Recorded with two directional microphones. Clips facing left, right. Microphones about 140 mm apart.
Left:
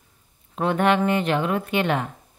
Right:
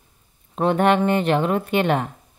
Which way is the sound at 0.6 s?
30° right (ahead or behind).